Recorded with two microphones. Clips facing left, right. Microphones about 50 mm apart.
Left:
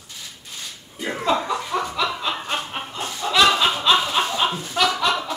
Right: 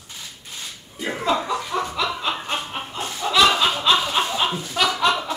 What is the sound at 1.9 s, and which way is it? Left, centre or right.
Snicker, centre.